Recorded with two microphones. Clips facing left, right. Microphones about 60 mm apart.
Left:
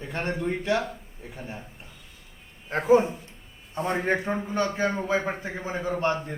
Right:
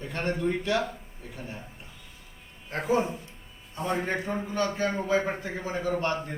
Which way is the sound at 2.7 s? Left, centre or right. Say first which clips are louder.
Left 6 dB; left.